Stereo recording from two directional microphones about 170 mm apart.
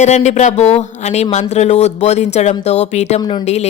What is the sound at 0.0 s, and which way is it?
Speech, 45° left (ahead or behind).